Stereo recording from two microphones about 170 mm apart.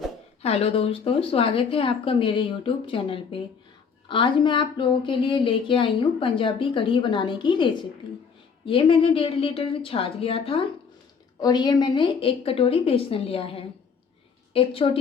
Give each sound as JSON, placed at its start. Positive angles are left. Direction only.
{"t": 0.4, "sound": "a woman's voice", "side_deg": 35}